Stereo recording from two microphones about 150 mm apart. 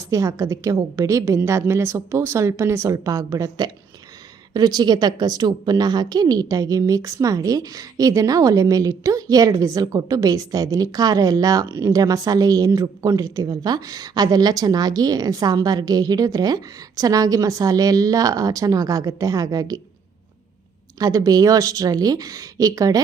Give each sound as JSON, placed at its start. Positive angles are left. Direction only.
{"t": 0.1, "sound": "a woman's voice", "side_deg": -20}
{"t": 21.0, "sound": "a woman's voice", "side_deg": -25}